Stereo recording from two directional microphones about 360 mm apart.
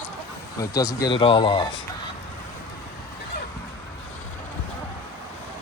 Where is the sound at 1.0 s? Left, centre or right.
Centre.